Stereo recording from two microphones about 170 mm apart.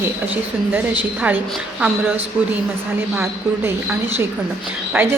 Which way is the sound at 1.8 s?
10° right (ahead or behind).